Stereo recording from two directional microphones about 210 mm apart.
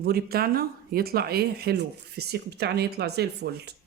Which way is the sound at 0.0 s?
45° right (ahead or behind).